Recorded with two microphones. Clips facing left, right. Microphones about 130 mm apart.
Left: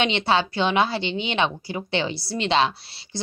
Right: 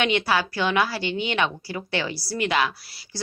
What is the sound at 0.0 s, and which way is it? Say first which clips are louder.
Speech: left 1 dB; 25° left (ahead or behind).